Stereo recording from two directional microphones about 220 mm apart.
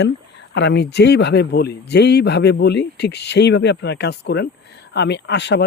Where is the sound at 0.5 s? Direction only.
50° left (ahead or behind).